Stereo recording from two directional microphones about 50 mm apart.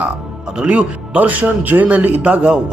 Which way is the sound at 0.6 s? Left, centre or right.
Right.